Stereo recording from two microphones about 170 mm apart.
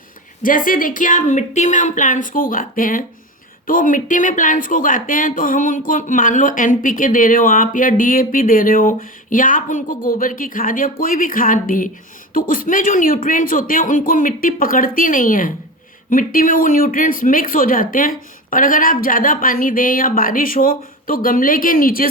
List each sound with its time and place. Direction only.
0.4 s speech: 55° left (ahead or behind)